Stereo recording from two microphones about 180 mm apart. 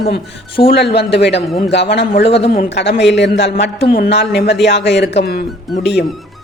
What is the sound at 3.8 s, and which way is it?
A man's voice, 60° left (ahead or behind).